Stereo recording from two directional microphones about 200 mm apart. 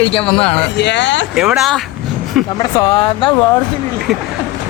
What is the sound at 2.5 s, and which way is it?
Speech, 20° left (ahead or behind).